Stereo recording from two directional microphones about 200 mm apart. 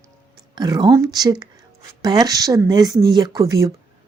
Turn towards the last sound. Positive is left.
turn(degrees=-15)  # may be behind; listen again after turning